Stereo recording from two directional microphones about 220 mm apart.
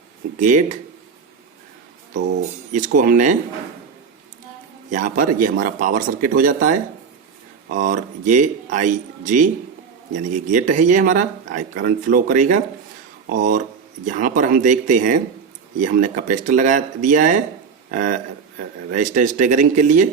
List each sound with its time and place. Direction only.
0.3 s speech: 35° right (ahead or behind)
2.1 s speech: 35° right (ahead or behind)
4.9 s speech: 35° right (ahead or behind)
10.5 s speech: 35° right (ahead or behind)